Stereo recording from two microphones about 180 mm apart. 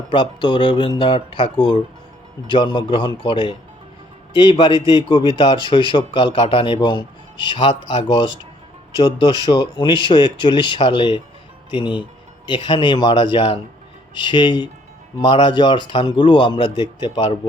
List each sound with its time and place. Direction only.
0.1 s a man's voice: 25° left (ahead or behind)